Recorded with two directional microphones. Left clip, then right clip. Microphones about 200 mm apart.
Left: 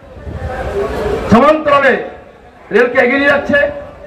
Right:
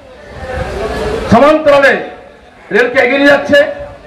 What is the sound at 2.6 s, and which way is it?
Speech, 35° right (ahead or behind).